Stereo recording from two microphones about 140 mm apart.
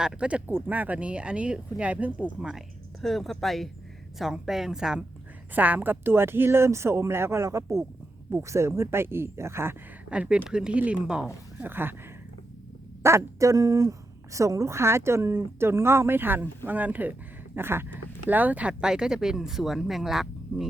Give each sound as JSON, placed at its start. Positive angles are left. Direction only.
{"t": 0.0, "sound": "speech", "side_deg": -5}
{"t": 13.0, "sound": "speech", "side_deg": -20}